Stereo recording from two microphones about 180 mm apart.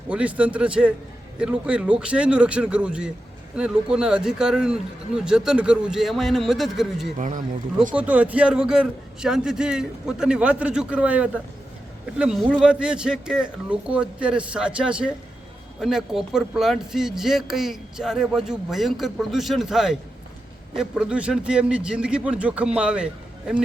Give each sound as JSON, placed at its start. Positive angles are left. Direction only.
{"t": 0.1, "sound": "speech", "side_deg": -5}
{"t": 7.2, "sound": "speech", "side_deg": -45}
{"t": 7.9, "sound": "speech", "side_deg": -10}